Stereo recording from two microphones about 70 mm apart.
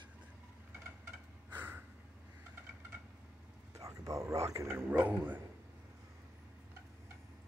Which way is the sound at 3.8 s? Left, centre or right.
Right.